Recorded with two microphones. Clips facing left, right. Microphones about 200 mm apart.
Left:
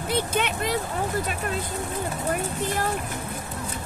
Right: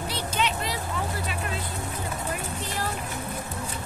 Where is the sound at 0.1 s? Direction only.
55° left (ahead or behind).